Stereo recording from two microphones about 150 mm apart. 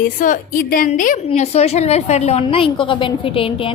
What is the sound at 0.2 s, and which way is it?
Speech, 65° left (ahead or behind).